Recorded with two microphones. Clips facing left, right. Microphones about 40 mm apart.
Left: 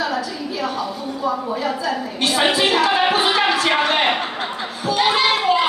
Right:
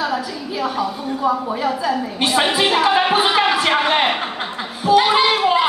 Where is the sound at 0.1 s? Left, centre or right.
Centre.